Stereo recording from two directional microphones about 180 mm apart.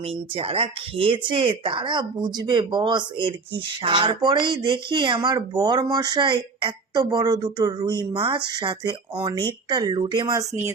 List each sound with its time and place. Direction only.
0.0 s speech: 30° right (ahead or behind)